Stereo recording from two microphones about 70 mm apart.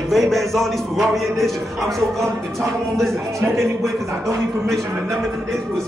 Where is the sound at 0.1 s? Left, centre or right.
Centre.